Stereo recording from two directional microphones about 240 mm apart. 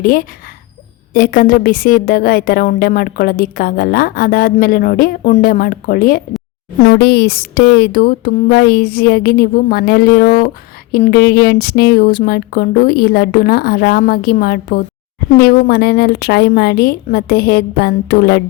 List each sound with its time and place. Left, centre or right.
0.0 s a woman's voice: left